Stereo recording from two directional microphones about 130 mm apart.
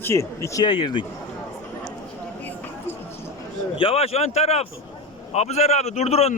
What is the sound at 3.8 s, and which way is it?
A man's voice, 50° left (ahead or behind).